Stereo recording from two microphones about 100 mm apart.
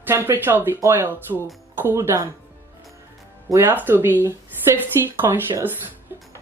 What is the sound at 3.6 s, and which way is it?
Speech, 20° right (ahead or behind).